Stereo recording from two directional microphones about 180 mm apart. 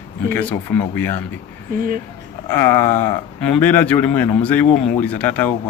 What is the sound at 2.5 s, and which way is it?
Speech, 10° left (ahead or behind).